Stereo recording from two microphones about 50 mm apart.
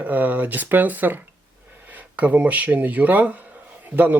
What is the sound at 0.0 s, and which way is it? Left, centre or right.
Speech, right.